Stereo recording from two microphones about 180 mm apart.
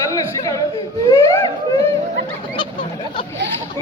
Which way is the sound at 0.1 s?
20° left (ahead or behind).